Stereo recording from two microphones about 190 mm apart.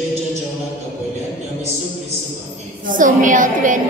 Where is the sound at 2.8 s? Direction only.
45° right (ahead or behind).